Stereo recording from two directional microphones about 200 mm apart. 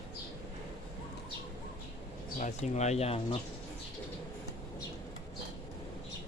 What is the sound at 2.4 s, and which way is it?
Speech, 35° left (ahead or behind).